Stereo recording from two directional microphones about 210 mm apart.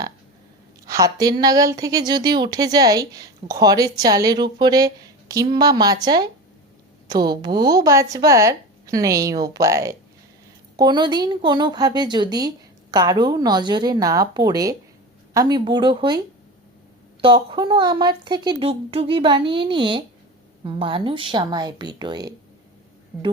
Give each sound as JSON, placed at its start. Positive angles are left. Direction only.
{"t": 0.9, "sound": "a woman's voice", "side_deg": -15}